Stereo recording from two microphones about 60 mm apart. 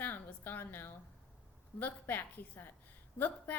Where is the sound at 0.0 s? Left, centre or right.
Left.